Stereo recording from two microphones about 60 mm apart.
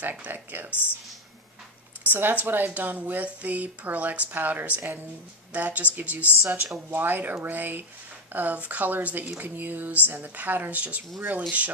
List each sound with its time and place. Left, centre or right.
0.0 s speech: right
2.0 s speech: right